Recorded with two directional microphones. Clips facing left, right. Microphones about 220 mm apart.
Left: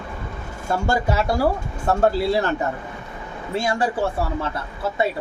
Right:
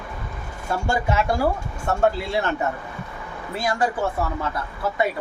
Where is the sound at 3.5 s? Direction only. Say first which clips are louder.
Left 1 dB; 25° left (ahead or behind).